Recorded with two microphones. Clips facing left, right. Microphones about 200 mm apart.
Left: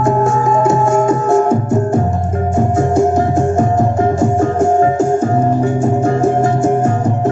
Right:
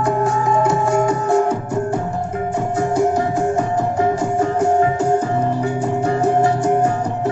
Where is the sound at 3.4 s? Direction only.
45° left (ahead or behind).